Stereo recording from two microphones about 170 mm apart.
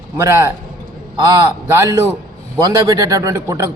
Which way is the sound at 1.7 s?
15° right (ahead or behind).